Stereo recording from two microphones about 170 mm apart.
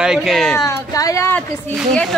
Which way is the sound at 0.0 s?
Centre (ahead or behind).